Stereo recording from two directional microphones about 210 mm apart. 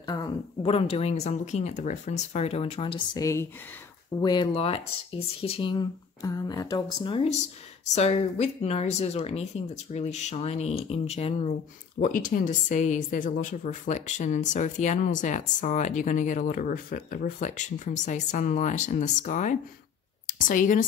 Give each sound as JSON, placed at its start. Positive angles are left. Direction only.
{"t": 0.0, "sound": "speech", "side_deg": 20}
{"t": 3.1, "sound": "speech", "side_deg": 15}
{"t": 12.0, "sound": "a woman's voice", "side_deg": 40}